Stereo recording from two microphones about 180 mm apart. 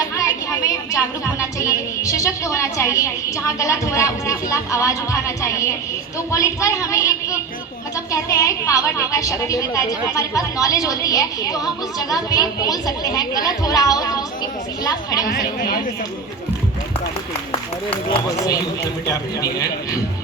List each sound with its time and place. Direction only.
0.2 s a woman's voice: 15° left (ahead or behind)
15.3 s speech: 55° left (ahead or behind)